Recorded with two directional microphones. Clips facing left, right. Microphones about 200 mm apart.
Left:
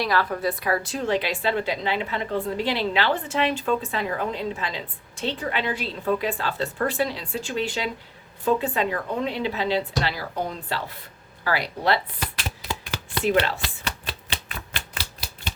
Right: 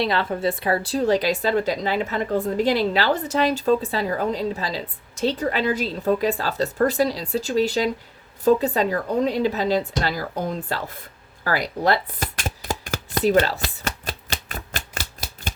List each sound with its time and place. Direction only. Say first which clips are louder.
0.0 s speech: right 2 dB; 25° right (ahead or behind); by 10.9 s 45° right (ahead or behind)
11.4 s chopping: right 2 dB; 45° right (ahead or behind)